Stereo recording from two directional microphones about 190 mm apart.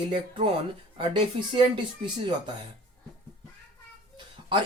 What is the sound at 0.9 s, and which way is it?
Speech, 25° right (ahead or behind).